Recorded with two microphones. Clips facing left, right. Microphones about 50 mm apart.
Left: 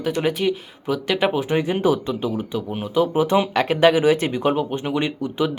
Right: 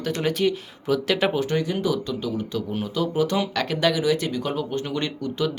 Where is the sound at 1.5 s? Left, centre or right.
Left.